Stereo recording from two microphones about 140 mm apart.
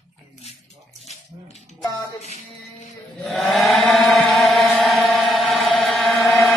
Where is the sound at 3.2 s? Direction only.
Centre (ahead or behind).